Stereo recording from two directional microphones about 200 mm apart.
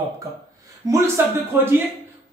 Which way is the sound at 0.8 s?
15° right (ahead or behind).